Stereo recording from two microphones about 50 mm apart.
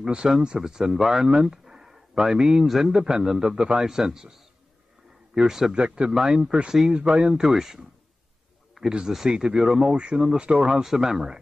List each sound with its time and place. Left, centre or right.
0.0 s speech: centre
7.4 s speech: centre
8.8 s a sound: centre
9.1 s speech: centre